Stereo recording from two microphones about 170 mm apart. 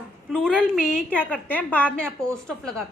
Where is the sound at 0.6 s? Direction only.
5° left (ahead or behind).